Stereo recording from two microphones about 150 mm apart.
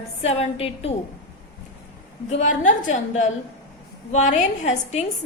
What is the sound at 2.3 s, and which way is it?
A woman's voice, 55° left (ahead or behind).